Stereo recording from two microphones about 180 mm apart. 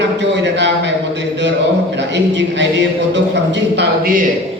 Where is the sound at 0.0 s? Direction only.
75° right (ahead or behind).